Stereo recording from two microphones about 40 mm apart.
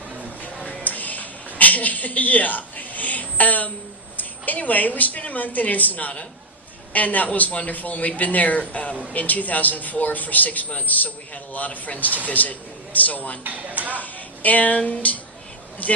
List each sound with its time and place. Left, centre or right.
0.6 s a sound: left
4.2 s a woman's voice: left
13.4 s speech: right
13.9 s speech: left